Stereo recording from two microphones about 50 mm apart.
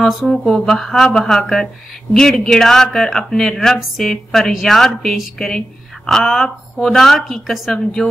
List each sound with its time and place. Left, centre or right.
0.0 s a woman's voice: centre